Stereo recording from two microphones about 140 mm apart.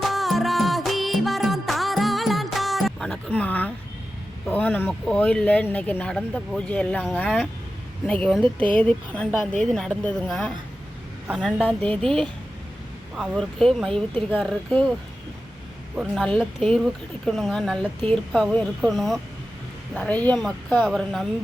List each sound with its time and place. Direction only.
0.0 s music: centre (ahead or behind)
4.4 s a sound: 10° left (ahead or behind)
5.0 s a woman's voice: 5° left (ahead or behind)
16.1 s a woman's voice: 5° left (ahead or behind)